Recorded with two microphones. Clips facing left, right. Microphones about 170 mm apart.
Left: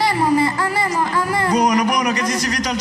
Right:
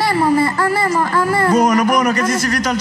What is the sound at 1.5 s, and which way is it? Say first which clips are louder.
Speech: right 2 dB; 50° right (ahead or behind).